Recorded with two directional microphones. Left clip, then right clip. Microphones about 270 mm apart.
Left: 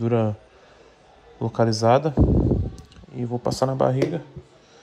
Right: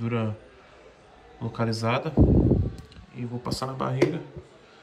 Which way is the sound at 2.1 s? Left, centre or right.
Centre.